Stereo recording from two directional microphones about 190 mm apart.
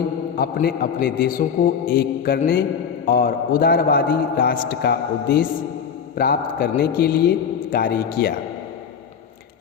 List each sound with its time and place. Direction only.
0.3 s a man's voice: 55° left (ahead or behind)